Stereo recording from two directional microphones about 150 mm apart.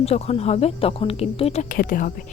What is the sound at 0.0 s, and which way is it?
Speech, 45° left (ahead or behind).